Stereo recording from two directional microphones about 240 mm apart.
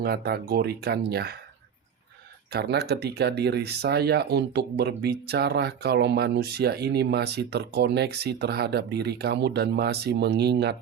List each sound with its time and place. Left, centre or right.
0.0 s speech: right
2.5 s speech: right